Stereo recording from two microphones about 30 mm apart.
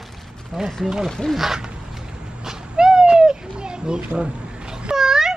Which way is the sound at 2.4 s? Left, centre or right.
Right.